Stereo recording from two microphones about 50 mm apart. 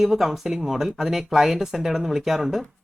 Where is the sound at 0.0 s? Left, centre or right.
Centre.